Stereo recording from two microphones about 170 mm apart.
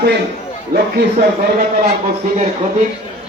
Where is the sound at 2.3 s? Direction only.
45° right (ahead or behind).